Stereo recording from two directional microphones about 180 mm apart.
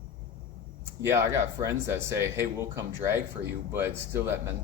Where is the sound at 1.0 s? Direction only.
15° right (ahead or behind).